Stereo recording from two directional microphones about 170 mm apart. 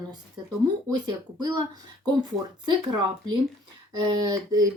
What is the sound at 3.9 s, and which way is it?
Speech, 25° right (ahead or behind).